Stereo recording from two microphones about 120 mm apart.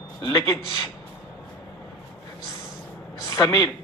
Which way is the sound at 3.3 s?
30° left (ahead or behind).